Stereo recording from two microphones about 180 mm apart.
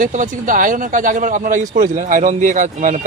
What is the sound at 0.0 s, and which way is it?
Speech, 45° right (ahead or behind).